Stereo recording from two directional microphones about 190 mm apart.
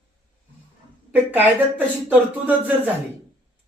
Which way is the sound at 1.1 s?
10° right (ahead or behind).